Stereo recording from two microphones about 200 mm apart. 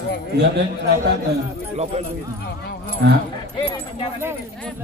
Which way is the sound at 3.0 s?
55° right (ahead or behind).